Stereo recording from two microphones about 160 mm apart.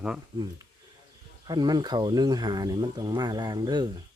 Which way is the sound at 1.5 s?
25° right (ahead or behind).